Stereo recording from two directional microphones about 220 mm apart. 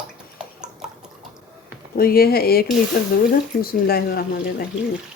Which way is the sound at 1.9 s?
45° left (ahead or behind).